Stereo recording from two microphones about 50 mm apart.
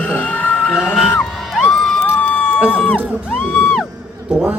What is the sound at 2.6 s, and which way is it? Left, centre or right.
Speech, centre.